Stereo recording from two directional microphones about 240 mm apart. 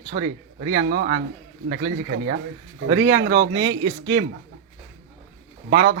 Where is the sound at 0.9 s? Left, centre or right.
Right.